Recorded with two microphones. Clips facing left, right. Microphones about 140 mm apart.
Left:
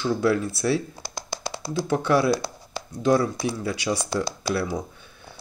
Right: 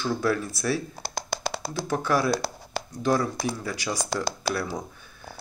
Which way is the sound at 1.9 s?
25° left (ahead or behind).